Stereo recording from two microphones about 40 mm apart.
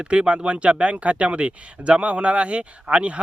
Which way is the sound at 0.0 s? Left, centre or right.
Right.